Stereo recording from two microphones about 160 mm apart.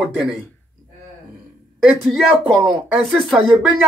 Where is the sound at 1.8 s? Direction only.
Centre (ahead or behind).